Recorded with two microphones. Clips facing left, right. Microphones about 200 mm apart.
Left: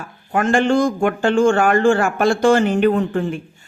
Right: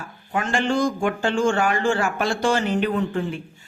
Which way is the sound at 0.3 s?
50° left (ahead or behind).